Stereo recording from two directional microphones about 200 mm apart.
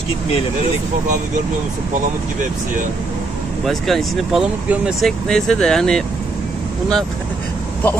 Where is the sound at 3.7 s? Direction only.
Centre (ahead or behind).